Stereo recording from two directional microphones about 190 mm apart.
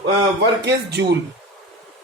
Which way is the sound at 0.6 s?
60° right (ahead or behind).